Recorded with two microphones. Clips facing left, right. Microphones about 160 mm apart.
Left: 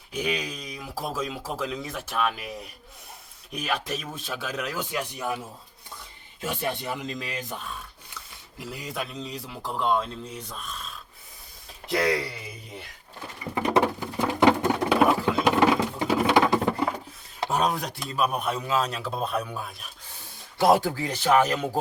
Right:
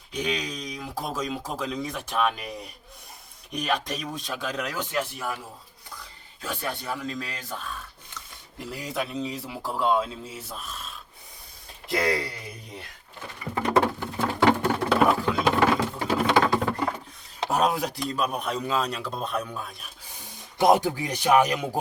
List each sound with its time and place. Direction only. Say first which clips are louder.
0.1 s speech: even; 5° left (ahead or behind)
6.4 s speech: left 3 dB; 20° left (ahead or behind)
8.1 s speech: right 2 dB; centre (ahead or behind)
13.5 s patter: even; 20° left (ahead or behind)
17.5 s speech: right 2 dB; centre (ahead or behind)
20.2 s speech: right 1 dB; 20° right (ahead or behind)